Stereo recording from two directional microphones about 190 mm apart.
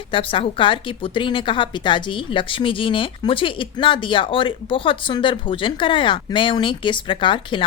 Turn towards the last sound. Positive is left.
turn(degrees=25)  # may be behind; listen again after turning